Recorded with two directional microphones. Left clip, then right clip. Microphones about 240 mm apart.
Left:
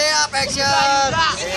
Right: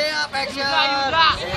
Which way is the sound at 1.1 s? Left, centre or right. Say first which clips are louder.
Right 2 dB; right.